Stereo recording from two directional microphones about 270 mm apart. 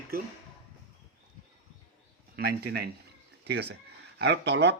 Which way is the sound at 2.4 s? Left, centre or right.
Right.